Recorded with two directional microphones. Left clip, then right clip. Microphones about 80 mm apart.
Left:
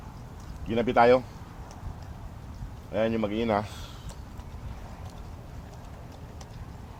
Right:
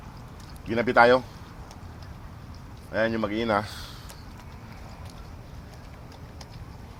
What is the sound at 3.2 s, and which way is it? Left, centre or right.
Speech, centre.